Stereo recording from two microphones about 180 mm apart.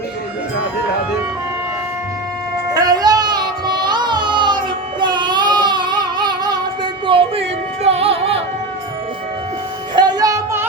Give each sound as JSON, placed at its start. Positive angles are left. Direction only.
{"t": 2.7, "sound": "music", "side_deg": -20}
{"t": 9.9, "sound": "music", "side_deg": -25}